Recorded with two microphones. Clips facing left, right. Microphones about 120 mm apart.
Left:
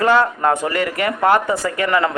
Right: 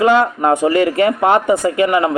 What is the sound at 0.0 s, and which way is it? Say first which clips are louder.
Speech: right 3 dB; 15° right (ahead or behind).